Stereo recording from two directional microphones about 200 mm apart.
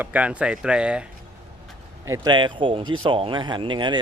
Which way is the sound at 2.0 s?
15° right (ahead or behind).